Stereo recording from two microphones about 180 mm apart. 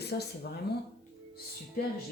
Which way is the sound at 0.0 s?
65° left (ahead or behind).